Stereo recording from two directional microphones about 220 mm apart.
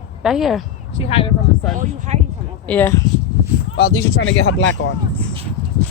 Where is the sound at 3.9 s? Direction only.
60° left (ahead or behind).